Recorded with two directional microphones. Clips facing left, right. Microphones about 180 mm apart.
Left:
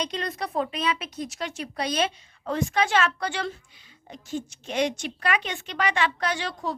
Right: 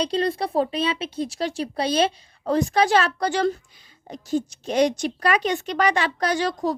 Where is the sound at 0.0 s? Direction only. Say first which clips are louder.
Right 7 dB; 30° right (ahead or behind).